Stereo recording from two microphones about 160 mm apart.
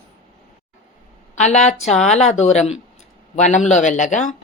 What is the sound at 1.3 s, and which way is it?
Speech, 45° left (ahead or behind).